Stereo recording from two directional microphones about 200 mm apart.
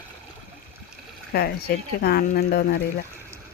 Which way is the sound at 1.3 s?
50° left (ahead or behind).